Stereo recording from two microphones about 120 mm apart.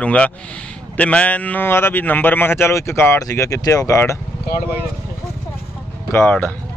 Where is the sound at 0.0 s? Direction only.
10° left (ahead or behind).